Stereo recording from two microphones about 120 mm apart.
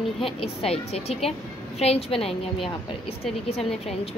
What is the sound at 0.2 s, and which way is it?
A woman's voice, 50° left (ahead or behind).